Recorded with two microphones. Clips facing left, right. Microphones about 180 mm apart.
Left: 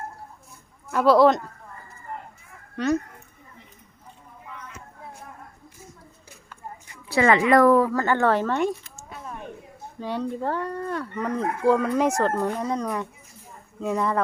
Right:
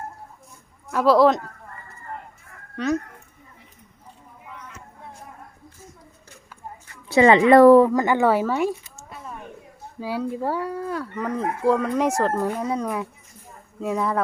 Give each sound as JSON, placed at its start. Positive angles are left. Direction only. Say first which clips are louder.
{"t": 0.9, "sound": "speech", "louder": "even", "side_deg": 0}
{"t": 2.7, "sound": "speech", "louder": "even", "side_deg": 0}
{"t": 7.1, "sound": "speech", "louder": "right 5 dB", "side_deg": -20}